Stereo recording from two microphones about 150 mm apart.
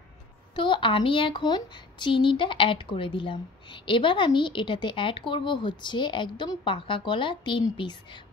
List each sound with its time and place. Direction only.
0.6 s speech: 35° left (ahead or behind)